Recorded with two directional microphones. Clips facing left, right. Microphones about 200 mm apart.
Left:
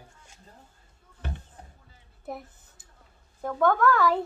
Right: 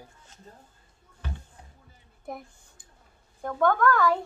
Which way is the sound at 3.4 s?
5° left (ahead or behind).